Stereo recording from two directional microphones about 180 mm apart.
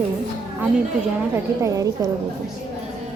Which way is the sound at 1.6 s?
20° right (ahead or behind).